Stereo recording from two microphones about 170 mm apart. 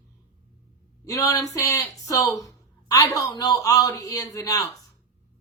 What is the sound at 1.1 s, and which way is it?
A man's voice, 20° left (ahead or behind).